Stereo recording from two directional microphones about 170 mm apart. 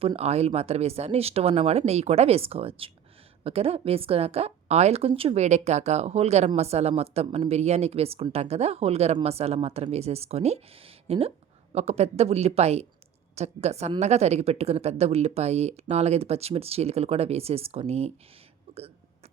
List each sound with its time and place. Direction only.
0.0 s speech: 35° right (ahead or behind)